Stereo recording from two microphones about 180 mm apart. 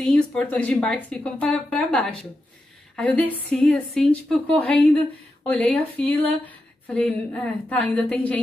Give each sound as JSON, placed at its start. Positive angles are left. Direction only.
{"t": 0.0, "sound": "a woman's voice", "side_deg": 5}